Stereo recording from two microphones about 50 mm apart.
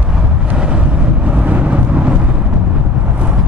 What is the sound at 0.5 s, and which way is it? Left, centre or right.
Vehicle, right.